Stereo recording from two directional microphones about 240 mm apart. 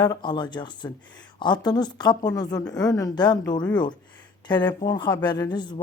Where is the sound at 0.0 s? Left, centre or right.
Centre.